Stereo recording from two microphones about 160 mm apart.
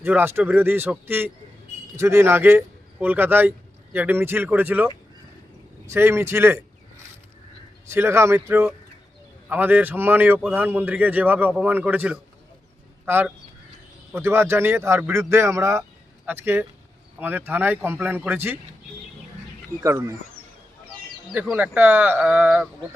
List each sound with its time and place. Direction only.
0.0 s speech: 10° right (ahead or behind)
7.9 s speech: 15° right (ahead or behind)
19.8 s speech: 20° right (ahead or behind)
21.3 s speech: 5° right (ahead or behind)